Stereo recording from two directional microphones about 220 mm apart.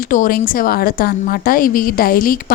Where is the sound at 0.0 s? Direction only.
35° left (ahead or behind).